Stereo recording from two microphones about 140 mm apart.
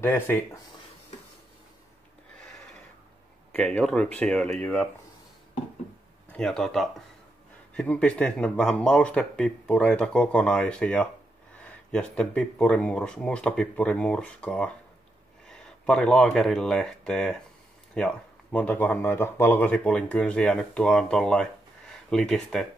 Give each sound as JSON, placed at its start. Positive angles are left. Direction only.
{"t": 0.0, "sound": "speech", "side_deg": 15}
{"t": 3.5, "sound": "speech", "side_deg": 10}
{"t": 6.3, "sound": "speech", "side_deg": 5}